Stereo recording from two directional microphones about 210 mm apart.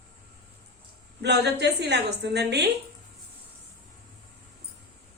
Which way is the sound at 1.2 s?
55° right (ahead or behind).